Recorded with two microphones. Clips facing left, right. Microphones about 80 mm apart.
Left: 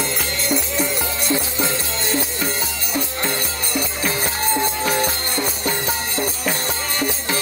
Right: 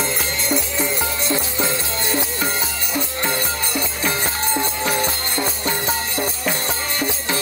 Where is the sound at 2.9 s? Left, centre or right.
Right.